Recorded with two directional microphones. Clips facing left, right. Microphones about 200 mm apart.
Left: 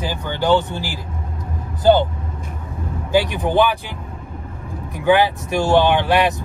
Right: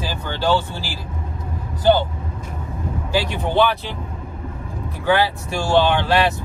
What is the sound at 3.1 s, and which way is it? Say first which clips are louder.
Speech: left 3 dB; 15° left (ahead or behind).